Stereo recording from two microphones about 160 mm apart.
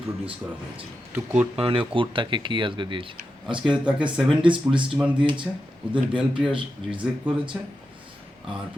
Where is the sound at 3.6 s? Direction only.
5° right (ahead or behind).